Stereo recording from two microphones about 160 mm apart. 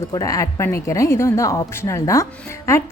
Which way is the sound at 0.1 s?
20° left (ahead or behind).